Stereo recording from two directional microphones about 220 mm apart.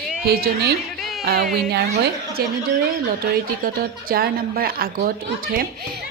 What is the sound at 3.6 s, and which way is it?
A woman's voice, 40° right (ahead or behind).